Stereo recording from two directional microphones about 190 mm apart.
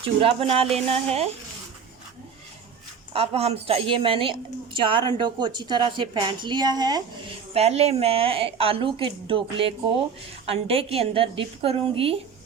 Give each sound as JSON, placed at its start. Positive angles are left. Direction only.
{"t": 0.0, "sound": "a woman's voice", "side_deg": -30}
{"t": 3.1, "sound": "a woman's voice", "side_deg": -30}
{"t": 7.5, "sound": "a woman's voice", "side_deg": -35}